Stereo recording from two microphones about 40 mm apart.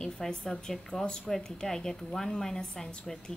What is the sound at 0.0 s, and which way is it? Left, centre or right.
A woman's voice, centre.